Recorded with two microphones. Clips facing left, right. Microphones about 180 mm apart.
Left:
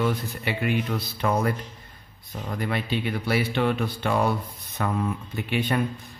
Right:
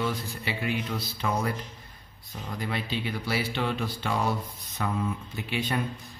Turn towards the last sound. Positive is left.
turn(degrees=60)  # may be behind; listen again after turning